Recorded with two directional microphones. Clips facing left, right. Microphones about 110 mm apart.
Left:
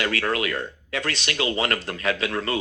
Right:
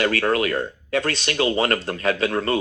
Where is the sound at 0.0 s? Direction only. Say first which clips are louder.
Right 4 dB; 35° right (ahead or behind).